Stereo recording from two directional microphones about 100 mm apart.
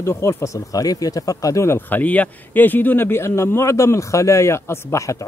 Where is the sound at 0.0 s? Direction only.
25° left (ahead or behind).